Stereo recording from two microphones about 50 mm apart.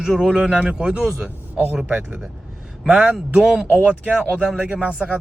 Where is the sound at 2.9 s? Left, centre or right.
Centre.